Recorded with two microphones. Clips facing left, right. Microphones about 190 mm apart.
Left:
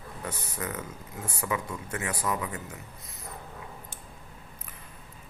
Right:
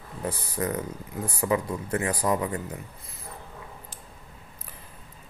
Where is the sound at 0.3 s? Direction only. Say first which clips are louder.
Right 7 dB; 35° right (ahead or behind).